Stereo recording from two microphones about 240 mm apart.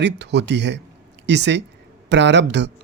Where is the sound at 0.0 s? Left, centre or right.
Right.